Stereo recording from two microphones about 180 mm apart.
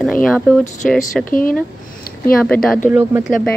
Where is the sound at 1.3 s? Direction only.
50° left (ahead or behind).